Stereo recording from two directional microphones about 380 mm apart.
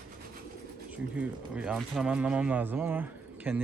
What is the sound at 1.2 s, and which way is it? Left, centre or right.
Speech, centre.